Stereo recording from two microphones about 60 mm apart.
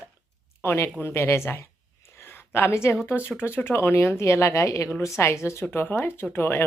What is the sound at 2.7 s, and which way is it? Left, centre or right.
Speech, left.